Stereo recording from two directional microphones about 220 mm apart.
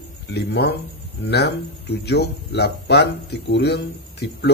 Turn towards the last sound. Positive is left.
turn(degrees=50)  # may be behind; listen again after turning